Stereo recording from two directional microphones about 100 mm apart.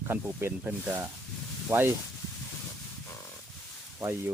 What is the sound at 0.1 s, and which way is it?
Speech, 20° right (ahead or behind).